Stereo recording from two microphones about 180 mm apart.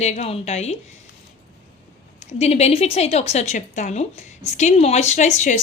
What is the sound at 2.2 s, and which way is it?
A woman's voice, 35° left (ahead or behind).